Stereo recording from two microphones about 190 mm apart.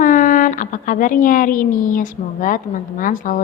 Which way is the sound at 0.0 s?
45° left (ahead or behind).